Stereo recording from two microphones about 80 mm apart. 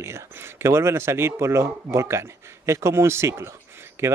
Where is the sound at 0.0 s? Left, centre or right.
Right.